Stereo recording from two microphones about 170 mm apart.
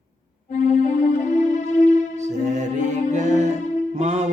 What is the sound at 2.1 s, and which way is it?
Music, 45° right (ahead or behind).